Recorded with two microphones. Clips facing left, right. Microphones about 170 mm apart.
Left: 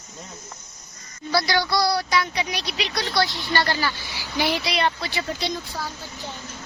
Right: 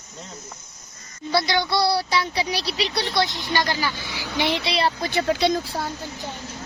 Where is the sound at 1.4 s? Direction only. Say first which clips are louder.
Even; 25° right (ahead or behind).